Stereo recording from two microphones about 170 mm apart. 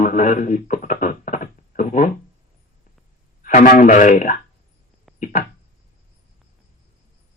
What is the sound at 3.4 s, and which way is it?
Speech, 50° left (ahead or behind).